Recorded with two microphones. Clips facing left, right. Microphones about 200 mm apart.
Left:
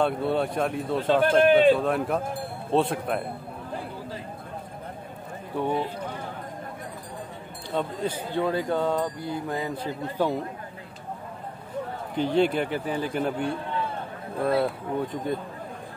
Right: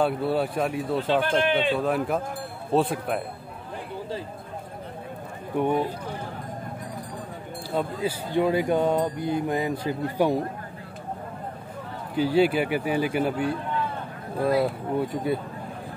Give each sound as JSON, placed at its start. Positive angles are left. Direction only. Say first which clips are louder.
{"t": 0.0, "sound": "speech", "louder": "even", "side_deg": -5}
{"t": 5.6, "sound": "speech", "louder": "right 3 dB", "side_deg": -15}
{"t": 7.7, "sound": "speech", "louder": "right 1 dB", "side_deg": -10}
{"t": 12.2, "sound": "speech", "louder": "right 2 dB", "side_deg": -5}